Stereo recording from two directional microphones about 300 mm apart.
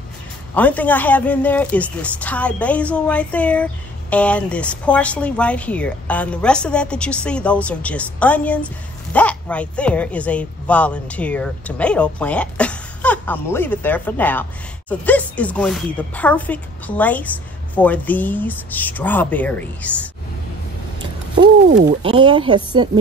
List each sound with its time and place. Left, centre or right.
0.6 s a woman's voice: centre
21.8 s speech: centre